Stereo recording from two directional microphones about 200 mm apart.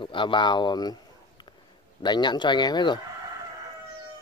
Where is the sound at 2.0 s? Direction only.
20° left (ahead or behind).